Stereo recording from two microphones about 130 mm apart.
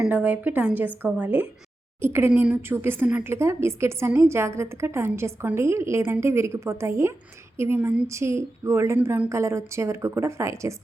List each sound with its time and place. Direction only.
0.0 s a woman's voice: 10° right (ahead or behind)